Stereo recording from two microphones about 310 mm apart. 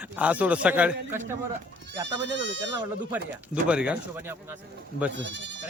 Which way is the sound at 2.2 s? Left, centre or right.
Right.